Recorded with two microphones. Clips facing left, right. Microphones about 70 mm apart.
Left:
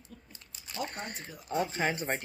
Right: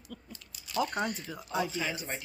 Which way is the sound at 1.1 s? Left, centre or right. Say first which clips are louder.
Even; left.